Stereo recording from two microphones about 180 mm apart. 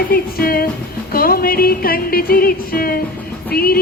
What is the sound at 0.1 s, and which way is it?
Music, 55° left (ahead or behind).